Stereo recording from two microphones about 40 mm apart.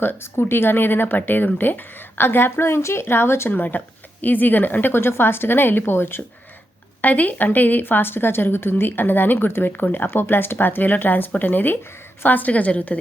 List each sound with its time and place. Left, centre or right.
0.0 s a woman's voice: left
3.5 s a woman's voice: left
7.0 s a woman's voice: left